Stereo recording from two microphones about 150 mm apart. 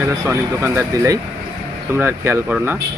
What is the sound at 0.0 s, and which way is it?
Speech, 15° right (ahead or behind).